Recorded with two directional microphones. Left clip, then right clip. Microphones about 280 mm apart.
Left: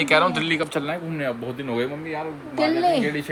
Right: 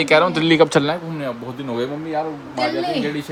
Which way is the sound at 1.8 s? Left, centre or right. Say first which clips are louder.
Right 8 dB; centre.